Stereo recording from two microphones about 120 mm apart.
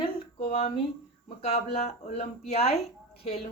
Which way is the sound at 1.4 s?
60° left (ahead or behind).